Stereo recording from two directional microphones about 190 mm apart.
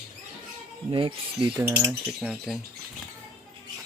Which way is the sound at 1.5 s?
10° right (ahead or behind).